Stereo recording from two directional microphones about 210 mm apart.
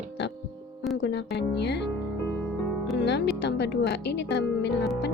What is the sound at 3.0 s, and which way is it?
Speech, 55° left (ahead or behind).